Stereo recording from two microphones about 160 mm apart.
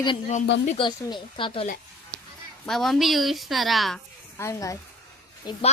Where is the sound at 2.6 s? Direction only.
Centre (ahead or behind).